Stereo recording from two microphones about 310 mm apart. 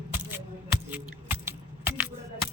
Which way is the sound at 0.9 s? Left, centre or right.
Centre.